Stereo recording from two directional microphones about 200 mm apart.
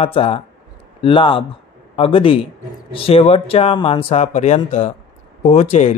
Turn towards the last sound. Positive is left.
turn(degrees=35)  # may be behind; listen again after turning